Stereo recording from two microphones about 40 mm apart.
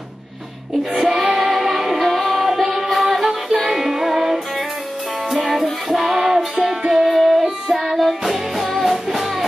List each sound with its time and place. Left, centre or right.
0.9 s music: centre